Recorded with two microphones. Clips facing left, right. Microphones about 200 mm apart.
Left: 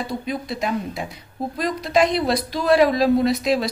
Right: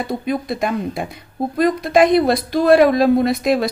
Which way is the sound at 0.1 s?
55° right (ahead or behind).